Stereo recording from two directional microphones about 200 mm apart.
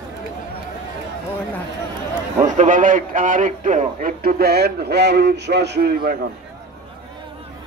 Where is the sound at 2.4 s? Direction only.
40° right (ahead or behind).